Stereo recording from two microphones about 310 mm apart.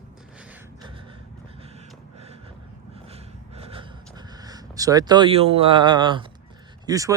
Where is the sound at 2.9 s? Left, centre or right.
Centre.